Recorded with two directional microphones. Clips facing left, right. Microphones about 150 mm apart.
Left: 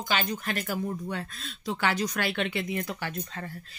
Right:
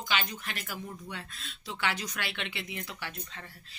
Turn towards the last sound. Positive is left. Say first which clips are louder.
# left 7 dB
turn(degrees=45)  # may be behind; listen again after turning